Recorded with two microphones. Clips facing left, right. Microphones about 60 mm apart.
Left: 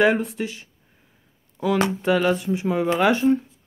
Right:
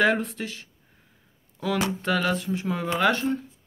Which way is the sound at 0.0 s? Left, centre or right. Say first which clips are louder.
Left 3 dB; centre.